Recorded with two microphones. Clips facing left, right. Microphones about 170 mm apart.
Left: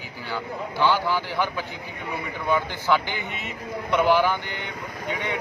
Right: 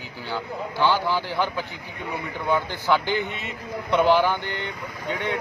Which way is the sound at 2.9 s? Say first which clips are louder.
Right 2 dB; 15° right (ahead or behind).